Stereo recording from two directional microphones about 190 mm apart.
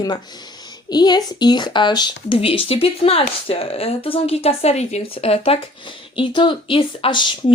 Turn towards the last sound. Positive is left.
turn(degrees=25)  # may be behind; listen again after turning